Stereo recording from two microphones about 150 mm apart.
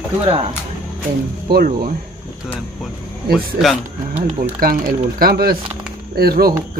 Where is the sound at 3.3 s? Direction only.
Centre (ahead or behind).